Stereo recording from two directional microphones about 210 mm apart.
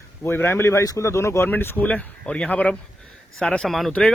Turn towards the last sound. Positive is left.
turn(degrees=0)  # may be behind; listen again after turning